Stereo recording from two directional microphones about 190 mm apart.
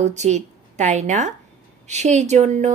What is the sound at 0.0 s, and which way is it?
A woman's voice, 35° right (ahead or behind).